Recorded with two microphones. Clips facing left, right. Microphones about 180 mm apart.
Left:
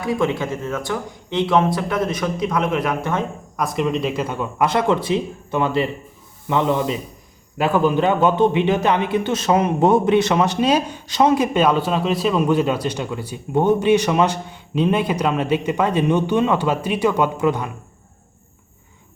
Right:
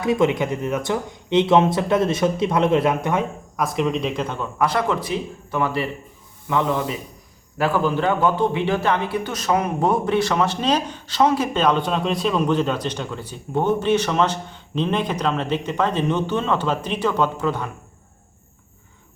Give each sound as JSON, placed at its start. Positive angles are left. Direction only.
{"t": 0.0, "sound": "speech", "side_deg": -20}
{"t": 3.6, "sound": "a man's voice", "side_deg": 0}